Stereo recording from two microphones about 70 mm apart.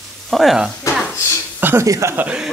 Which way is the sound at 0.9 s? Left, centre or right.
Left.